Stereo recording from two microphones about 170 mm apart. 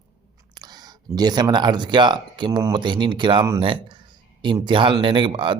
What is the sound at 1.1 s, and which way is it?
Speech, 25° right (ahead or behind).